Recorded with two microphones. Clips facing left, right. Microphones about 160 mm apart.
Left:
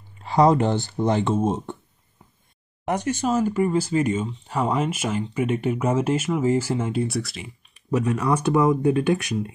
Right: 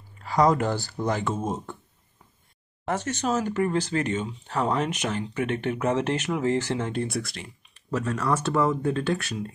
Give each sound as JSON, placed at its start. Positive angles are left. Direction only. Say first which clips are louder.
{"t": 0.2, "sound": "speech", "louder": "left 4 dB", "side_deg": 25}
{"t": 2.8, "sound": "speech", "louder": "left 4 dB", "side_deg": 15}
{"t": 7.7, "sound": "speech", "louder": "left 5 dB", "side_deg": 15}